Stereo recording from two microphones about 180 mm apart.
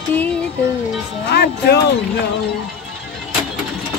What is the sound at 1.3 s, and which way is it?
Music, 65° left (ahead or behind).